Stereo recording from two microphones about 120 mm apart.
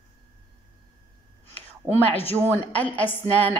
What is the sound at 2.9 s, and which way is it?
Speech, 45° left (ahead or behind).